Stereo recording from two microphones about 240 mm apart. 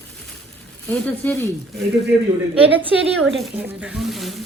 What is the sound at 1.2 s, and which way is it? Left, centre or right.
Speech, centre.